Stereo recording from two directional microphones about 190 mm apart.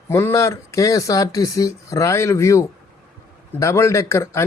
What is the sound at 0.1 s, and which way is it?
Speech, 15° left (ahead or behind).